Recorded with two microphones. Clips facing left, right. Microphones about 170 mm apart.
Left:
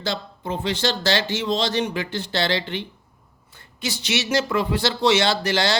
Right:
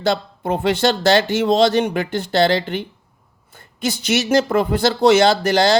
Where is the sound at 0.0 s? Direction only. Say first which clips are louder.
Right 8 dB; 60° right (ahead or behind).